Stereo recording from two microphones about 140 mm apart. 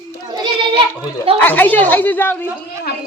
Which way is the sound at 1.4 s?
15° left (ahead or behind).